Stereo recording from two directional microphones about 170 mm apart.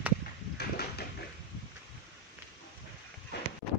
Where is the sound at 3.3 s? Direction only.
80° left.